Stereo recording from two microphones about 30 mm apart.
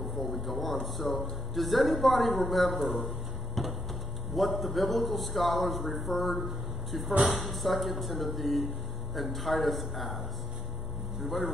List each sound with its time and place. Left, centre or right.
0.0 s a man's voice: centre
3.6 s a sound: centre
4.3 s a man's voice: centre